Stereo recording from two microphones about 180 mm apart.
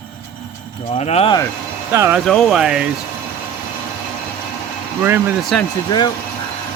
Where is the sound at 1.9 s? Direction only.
15° right (ahead or behind).